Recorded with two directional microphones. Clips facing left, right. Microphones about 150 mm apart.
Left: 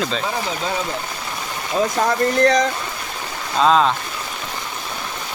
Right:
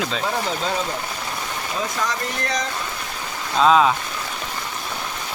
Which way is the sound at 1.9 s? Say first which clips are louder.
Left 8 dB; 50° left (ahead or behind).